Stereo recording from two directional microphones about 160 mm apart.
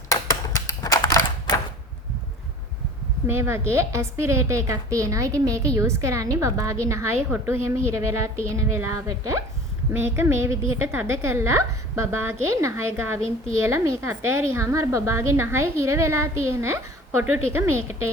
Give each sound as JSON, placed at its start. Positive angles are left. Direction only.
{"t": 0.1, "sound": "typewriter", "side_deg": 20}
{"t": 3.2, "sound": "a woman's voice", "side_deg": -15}